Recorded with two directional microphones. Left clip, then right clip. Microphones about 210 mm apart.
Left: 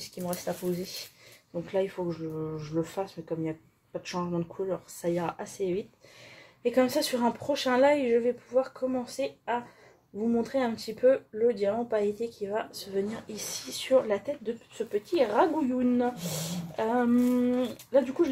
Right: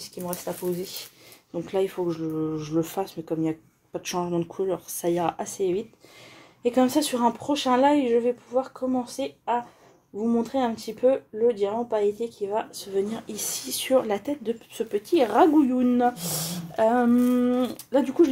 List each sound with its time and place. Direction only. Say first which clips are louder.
0.2 s speech: right 2 dB; 30° right (ahead or behind)
1.7 s speech: right 4 dB; 45° right (ahead or behind)
6.6 s speech: right 3 dB; 30° right (ahead or behind)
12.5 s speech: right 5 dB; 40° right (ahead or behind)